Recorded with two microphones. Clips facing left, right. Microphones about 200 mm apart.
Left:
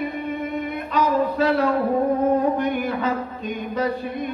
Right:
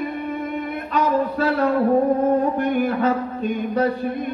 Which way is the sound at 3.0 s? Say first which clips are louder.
Right 4 dB; 50° right (ahead or behind).